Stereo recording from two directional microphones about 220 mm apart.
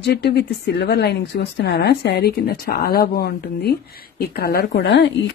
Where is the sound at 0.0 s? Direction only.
45° left (ahead or behind).